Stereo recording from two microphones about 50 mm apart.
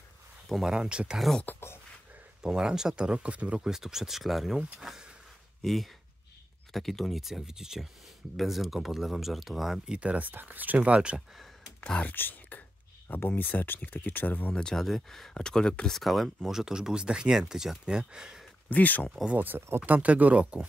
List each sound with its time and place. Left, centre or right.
0.7 s speech: centre
1.6 s a sound: left
2.4 s speech: centre
3.6 s speech: centre
5.6 s speech: centre
9.9 s speech: right
10.3 s speech: right
12.0 s speech: left
14.5 s speech: centre
15.9 s speech: centre
16.5 s speech: centre
18.7 s speech: left
19.3 s speech: right